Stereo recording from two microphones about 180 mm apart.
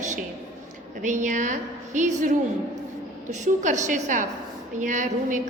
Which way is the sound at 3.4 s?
40° right (ahead or behind).